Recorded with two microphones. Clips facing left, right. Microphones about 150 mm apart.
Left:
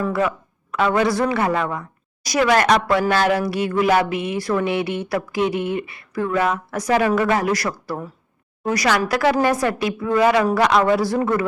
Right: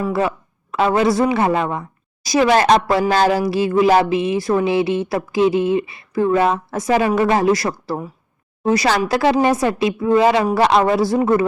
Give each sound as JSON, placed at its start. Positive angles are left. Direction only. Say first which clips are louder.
{"t": 0.1, "sound": "speech", "louder": "right 2 dB", "side_deg": -30}